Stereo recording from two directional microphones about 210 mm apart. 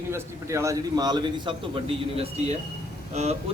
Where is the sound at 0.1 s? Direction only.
10° right (ahead or behind).